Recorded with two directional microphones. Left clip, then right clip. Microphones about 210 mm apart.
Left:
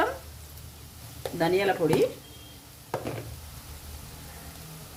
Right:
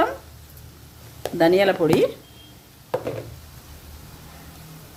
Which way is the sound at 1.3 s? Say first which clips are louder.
Right 8 dB; 40° right (ahead or behind).